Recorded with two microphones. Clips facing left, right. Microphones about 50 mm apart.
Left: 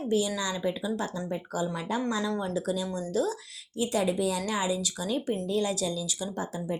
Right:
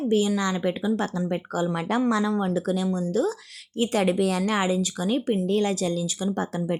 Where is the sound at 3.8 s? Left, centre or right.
Right.